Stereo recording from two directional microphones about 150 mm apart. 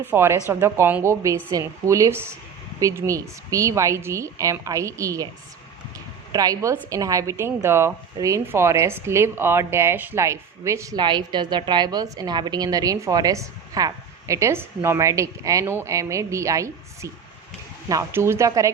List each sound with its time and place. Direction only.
0.0 s a woman's voice: 15° right (ahead or behind)
6.3 s a woman's voice: 25° right (ahead or behind)